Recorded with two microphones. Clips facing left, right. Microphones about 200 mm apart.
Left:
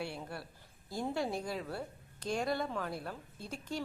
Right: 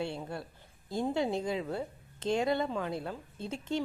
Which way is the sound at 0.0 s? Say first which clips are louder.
Right 5 dB; 25° right (ahead or behind).